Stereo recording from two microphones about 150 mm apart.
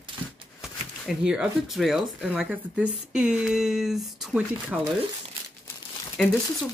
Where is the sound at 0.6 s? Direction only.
5° right (ahead or behind).